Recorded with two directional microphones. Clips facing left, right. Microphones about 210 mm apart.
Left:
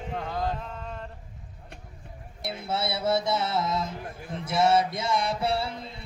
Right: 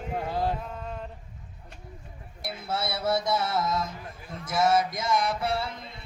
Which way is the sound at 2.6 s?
25° left (ahead or behind).